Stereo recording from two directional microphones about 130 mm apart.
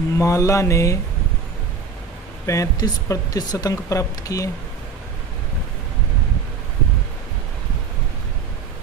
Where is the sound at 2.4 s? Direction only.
25° left (ahead or behind).